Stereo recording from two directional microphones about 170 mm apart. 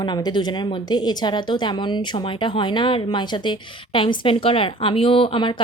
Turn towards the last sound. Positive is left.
turn(degrees=30)  # may be behind; listen again after turning